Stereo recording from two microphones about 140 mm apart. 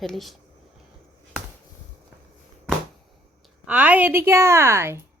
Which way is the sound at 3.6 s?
10° right (ahead or behind).